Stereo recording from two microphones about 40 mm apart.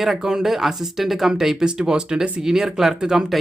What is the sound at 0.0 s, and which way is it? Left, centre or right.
Speech, centre.